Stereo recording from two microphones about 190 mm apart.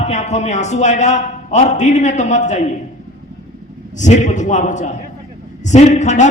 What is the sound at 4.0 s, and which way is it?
A man's voice, 40° left (ahead or behind).